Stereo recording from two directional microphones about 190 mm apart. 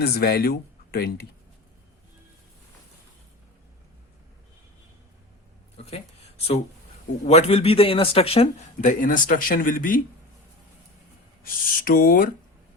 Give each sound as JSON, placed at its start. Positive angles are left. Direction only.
{"t": 0.0, "sound": "speech", "side_deg": 55}
{"t": 5.7, "sound": "a sound", "side_deg": 35}
{"t": 7.3, "sound": "speech", "side_deg": 35}
{"t": 11.9, "sound": "speech", "side_deg": 50}